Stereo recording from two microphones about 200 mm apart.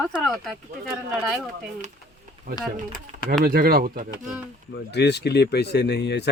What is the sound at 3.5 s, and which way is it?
Speech, 50° right (ahead or behind).